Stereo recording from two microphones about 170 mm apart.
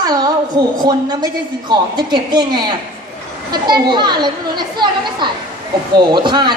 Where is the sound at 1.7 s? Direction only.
25° right (ahead or behind).